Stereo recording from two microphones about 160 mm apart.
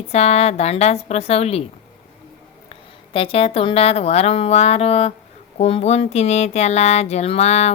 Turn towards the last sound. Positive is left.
turn(degrees=45)  # may be behind; listen again after turning